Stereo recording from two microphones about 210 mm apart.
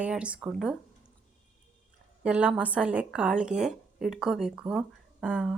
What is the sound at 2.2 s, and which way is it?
Speech, 5° right (ahead or behind).